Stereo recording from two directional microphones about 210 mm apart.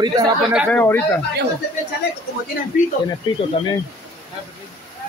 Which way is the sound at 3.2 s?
25° left (ahead or behind).